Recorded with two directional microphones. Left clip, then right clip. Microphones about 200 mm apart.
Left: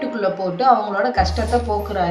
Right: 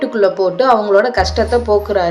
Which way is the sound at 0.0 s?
35° right (ahead or behind).